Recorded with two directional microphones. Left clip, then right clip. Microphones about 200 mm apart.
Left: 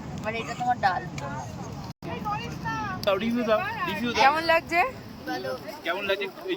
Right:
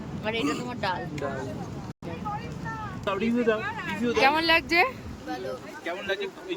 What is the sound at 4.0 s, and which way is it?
Speech, 10° right (ahead or behind).